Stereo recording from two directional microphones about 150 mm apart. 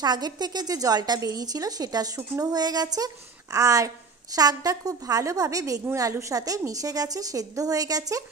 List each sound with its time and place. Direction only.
0.0 s a woman's voice: 30° right (ahead or behind)